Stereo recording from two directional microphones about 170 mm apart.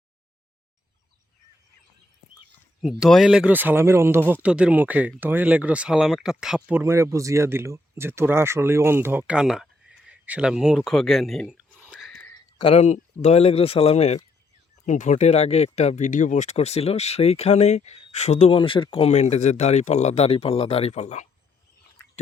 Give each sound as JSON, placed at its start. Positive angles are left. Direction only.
{"t": 2.8, "sound": "speech", "side_deg": 0}
{"t": 10.1, "sound": "a sound", "side_deg": -10}
{"t": 12.5, "sound": "speech", "side_deg": 35}